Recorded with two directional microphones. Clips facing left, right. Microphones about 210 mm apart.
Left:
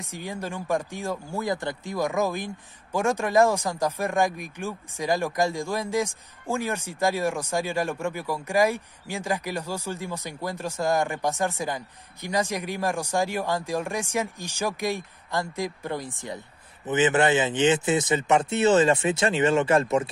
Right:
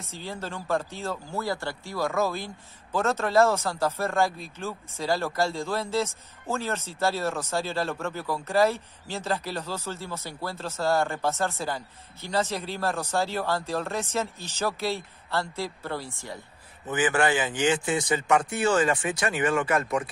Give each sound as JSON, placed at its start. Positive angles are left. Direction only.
{"t": 0.0, "sound": "speech", "side_deg": 15}